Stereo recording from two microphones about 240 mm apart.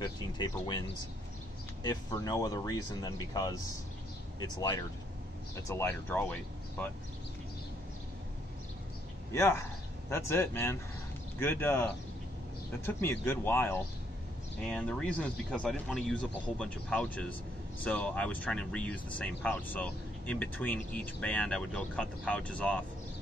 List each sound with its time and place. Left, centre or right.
0.0 s speech: centre
9.3 s speech: centre